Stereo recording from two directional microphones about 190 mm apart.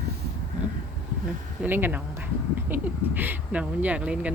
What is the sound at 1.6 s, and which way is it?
Speech, 10° right (ahead or behind).